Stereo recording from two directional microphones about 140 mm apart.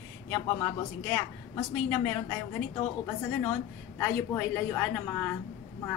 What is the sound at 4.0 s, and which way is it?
A woman's voice, 10° left (ahead or behind).